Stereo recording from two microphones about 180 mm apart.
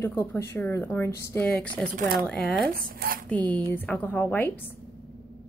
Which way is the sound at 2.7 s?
55° right (ahead or behind).